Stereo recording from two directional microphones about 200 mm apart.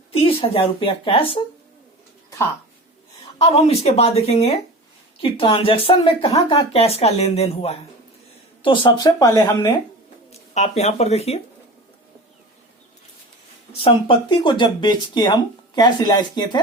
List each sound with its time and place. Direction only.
0.1 s speech: 30° left (ahead or behind)
3.3 s speech: 30° left (ahead or behind); by 9.7 s 15° left (ahead or behind)
10.5 s speech: 35° left (ahead or behind)
13.7 s speech: 25° left (ahead or behind)